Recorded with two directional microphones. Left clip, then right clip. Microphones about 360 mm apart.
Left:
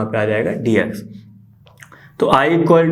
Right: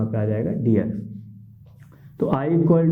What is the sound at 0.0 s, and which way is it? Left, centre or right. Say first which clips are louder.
Speech: left 8 dB; centre.